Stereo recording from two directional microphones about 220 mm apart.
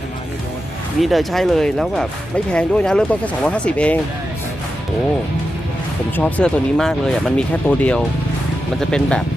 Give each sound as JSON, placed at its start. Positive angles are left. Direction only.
{"t": 1.0, "sound": "speech", "side_deg": 0}
{"t": 6.1, "sound": "speech", "side_deg": 5}